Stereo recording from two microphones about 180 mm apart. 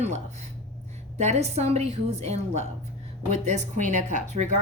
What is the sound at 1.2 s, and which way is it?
A woman's voice, 40° right (ahead or behind).